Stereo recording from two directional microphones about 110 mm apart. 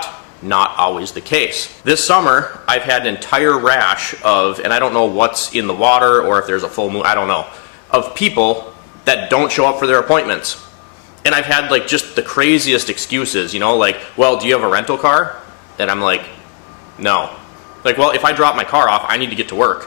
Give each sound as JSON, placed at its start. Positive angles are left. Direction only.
{"t": 0.4, "sound": "a man's voice", "side_deg": 15}